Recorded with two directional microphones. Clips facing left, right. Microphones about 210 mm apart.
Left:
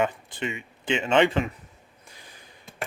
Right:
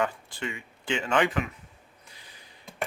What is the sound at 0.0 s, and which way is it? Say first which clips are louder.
Speech: left 3 dB; 20° left (ahead or behind).